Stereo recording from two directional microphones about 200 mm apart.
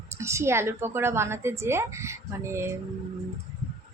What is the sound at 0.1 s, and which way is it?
Speech, 15° right (ahead or behind).